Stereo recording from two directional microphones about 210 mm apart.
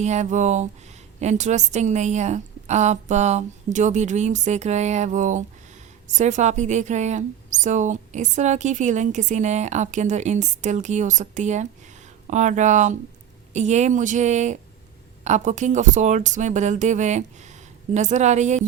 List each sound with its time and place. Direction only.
0.0 s a woman's voice: 35° right (ahead or behind)